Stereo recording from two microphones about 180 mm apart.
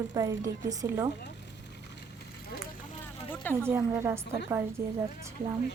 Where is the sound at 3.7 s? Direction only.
15° right (ahead or behind).